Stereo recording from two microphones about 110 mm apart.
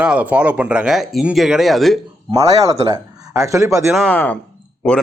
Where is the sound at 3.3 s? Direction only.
25° right (ahead or behind).